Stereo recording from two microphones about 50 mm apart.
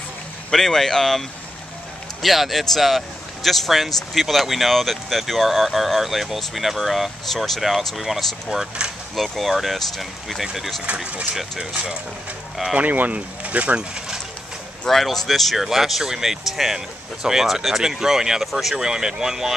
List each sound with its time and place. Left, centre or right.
0.5 s speech: centre
2.2 s speech: centre
12.7 s speech: right; by 14.2 s centre
14.9 s speech: centre